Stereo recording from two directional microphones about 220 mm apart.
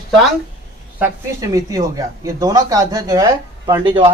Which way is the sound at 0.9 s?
10° right (ahead or behind).